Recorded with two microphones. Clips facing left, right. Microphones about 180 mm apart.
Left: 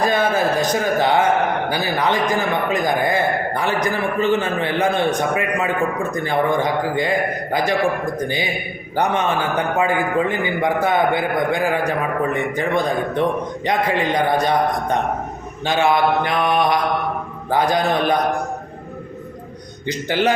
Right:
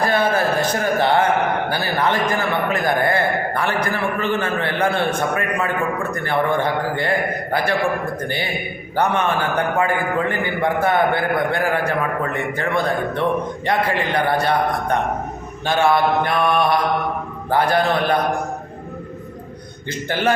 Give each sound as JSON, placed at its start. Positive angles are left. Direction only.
{"t": 0.0, "sound": "a man's voice", "side_deg": 15}
{"t": 9.7, "sound": "a man's voice", "side_deg": 15}
{"t": 19.9, "sound": "a man's voice", "side_deg": 15}